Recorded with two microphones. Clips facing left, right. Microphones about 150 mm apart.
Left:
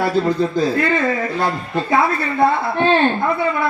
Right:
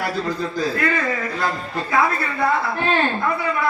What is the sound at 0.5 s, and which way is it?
A woman's voice, 25° left (ahead or behind).